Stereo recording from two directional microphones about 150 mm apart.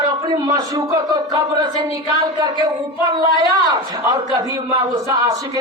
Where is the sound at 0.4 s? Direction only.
25° right (ahead or behind).